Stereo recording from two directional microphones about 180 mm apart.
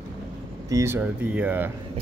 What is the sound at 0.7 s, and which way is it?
Speech, 15° right (ahead or behind).